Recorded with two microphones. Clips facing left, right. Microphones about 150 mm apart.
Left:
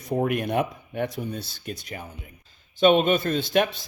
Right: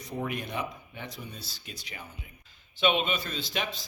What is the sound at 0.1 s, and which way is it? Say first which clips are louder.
Speech: left 10 dB; 60° left (ahead or behind).